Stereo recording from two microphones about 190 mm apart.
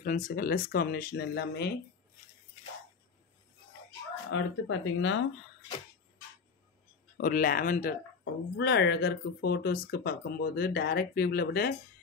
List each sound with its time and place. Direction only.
0.0 s speech: 45° left (ahead or behind)
4.3 s speech: 90° left
7.2 s speech: 45° left (ahead or behind)
8.2 s speech: 60° left (ahead or behind)